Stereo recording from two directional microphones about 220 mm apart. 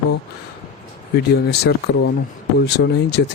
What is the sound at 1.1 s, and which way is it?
Speech, 45° left (ahead or behind).